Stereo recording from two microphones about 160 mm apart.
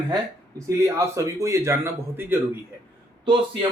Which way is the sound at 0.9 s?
20° right (ahead or behind).